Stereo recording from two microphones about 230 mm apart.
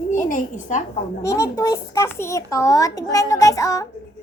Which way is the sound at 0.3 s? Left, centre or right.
Left.